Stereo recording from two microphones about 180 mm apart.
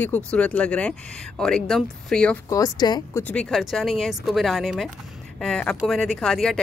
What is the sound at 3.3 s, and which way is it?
Speech, 5° left (ahead or behind).